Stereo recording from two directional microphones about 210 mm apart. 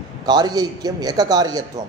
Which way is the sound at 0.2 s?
20° right (ahead or behind).